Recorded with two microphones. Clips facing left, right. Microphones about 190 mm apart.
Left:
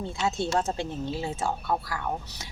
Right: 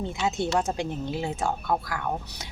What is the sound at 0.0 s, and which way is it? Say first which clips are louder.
A woman's voice: right 1 dB; 20° right (ahead or behind).